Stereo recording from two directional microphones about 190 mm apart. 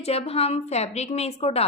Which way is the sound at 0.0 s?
35° left (ahead or behind).